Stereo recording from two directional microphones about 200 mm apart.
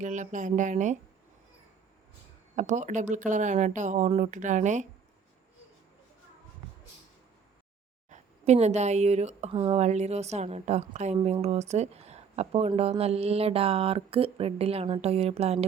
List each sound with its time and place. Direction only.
0.0 s speech: 40° right (ahead or behind)
2.6 s speech: 35° right (ahead or behind)
8.1 s a woman's voice: 35° right (ahead or behind)